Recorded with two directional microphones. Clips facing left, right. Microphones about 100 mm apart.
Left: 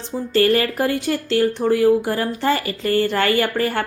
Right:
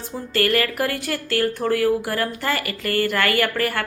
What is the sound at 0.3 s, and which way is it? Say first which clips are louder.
A woman's voice: left 4 dB; 25° left (ahead or behind).